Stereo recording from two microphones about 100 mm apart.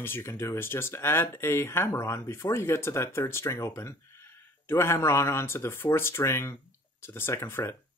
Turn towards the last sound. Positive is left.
turn(degrees=25)  # may be behind; listen again after turning